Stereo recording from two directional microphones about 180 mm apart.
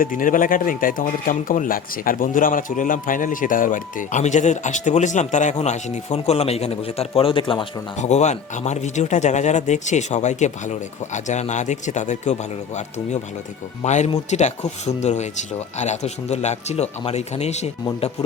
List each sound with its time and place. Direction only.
0.0 s speech: 50° left (ahead or behind); by 7.7 s 30° left (ahead or behind)
7.9 s speech: 40° left (ahead or behind)